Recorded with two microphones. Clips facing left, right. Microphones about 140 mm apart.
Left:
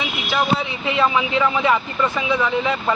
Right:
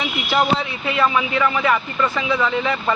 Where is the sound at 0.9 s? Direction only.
20° left (ahead or behind).